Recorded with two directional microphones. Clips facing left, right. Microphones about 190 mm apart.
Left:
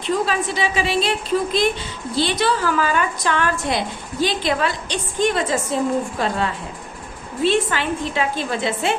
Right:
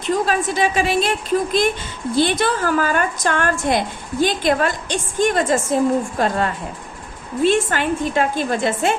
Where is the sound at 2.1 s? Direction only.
50° right (ahead or behind).